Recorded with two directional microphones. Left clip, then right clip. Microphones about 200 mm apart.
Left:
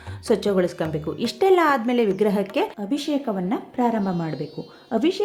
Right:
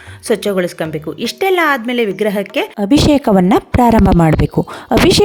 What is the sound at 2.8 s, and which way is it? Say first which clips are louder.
A woman's voice: right 14 dB; 45° right (ahead or behind).